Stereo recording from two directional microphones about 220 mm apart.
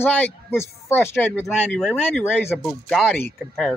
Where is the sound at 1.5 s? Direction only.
Centre (ahead or behind).